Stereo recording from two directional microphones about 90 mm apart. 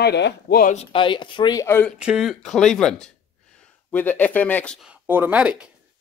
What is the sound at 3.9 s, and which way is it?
Speech, 20° left (ahead or behind).